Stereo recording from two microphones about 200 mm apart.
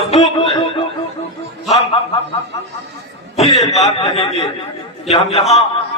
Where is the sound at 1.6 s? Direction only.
30° left (ahead or behind).